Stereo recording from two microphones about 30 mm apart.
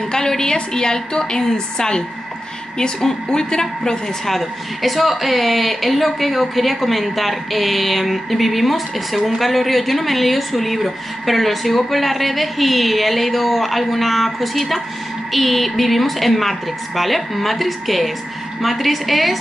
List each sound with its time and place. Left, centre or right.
0.1 s a woman's voice: centre
3.3 s a woman's voice: left
4.3 s a woman's voice: centre